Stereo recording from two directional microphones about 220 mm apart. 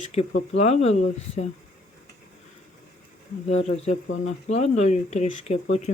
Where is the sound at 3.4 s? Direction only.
30° left (ahead or behind).